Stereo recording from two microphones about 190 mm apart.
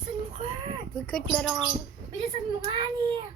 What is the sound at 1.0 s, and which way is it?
Speech, 5° left (ahead or behind).